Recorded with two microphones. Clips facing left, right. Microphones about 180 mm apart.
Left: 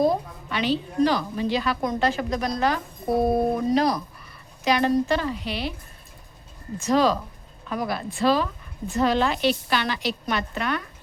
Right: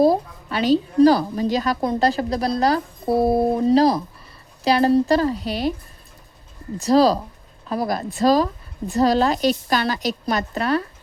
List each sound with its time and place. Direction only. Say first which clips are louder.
0.0 s a woman's voice: right 5 dB; 35° right (ahead or behind)
6.7 s a woman's voice: right 5 dB; 35° right (ahead or behind)